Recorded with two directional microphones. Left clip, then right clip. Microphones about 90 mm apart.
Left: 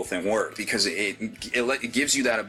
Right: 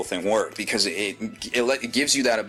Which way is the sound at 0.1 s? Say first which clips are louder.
Right 2 dB; 15° right (ahead or behind).